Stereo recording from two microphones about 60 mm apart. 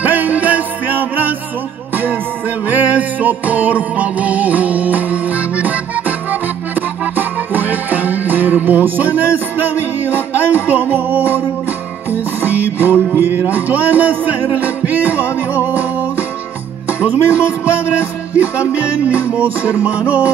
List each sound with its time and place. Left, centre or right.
0.0 s music: right
2.7 s music: right
17.0 s music: right